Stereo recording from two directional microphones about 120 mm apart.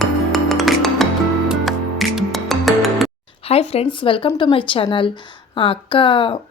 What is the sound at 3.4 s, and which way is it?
Speech, 55° left (ahead or behind).